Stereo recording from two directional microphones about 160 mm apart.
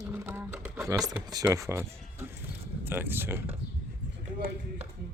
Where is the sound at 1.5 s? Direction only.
20° right (ahead or behind).